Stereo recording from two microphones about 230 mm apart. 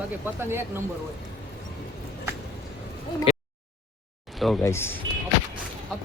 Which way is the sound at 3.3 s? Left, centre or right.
Left.